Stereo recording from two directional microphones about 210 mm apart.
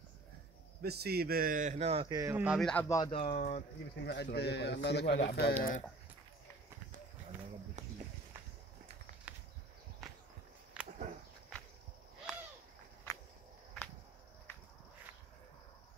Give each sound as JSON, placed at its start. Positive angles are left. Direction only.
{"t": 0.8, "sound": "speech", "side_deg": -50}
{"t": 2.0, "sound": "speech", "side_deg": -10}
{"t": 2.7, "sound": "speech", "side_deg": 10}
{"t": 3.0, "sound": "speech", "side_deg": 25}
{"t": 4.0, "sound": "a man's voice", "side_deg": 55}
{"t": 9.3, "sound": "a sound", "side_deg": -5}
{"t": 13.1, "sound": "walk", "side_deg": 10}